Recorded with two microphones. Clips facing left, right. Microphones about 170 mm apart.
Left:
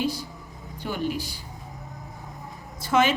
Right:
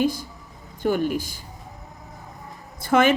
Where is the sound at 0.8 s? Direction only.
50° right (ahead or behind).